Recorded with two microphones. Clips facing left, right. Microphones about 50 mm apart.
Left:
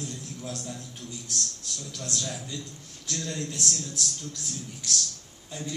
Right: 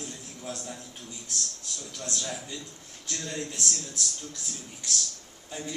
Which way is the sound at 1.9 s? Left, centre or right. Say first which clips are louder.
Even; centre.